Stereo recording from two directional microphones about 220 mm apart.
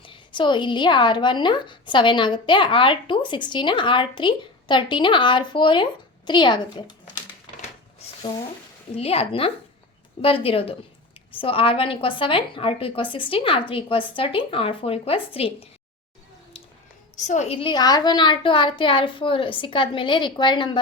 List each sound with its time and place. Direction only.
0.0 s speech: 20° left (ahead or behind)
9.0 s speech: 25° left (ahead or behind)
17.2 s speech: 35° left (ahead or behind)